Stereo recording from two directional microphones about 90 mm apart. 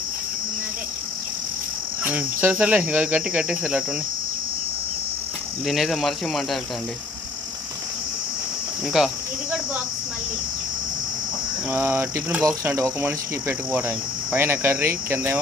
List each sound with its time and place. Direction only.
2.0 s speech: 15° right (ahead or behind)
5.6 s speech: centre (ahead or behind)
9.0 s speech: 5° right (ahead or behind)
11.7 s cricket: 25° right (ahead or behind)